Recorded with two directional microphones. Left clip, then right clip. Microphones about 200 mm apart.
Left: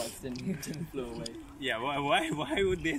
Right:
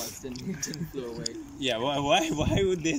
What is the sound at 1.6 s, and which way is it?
Speech, 15° right (ahead or behind).